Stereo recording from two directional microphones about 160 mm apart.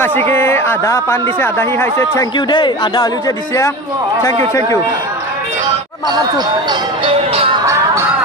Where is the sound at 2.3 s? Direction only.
30° left (ahead or behind).